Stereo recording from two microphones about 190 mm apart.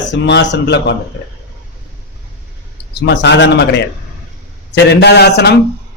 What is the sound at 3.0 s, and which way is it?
A man's voice, 65° left (ahead or behind).